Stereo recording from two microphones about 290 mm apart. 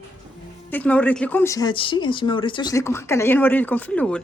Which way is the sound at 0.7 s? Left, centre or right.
Centre.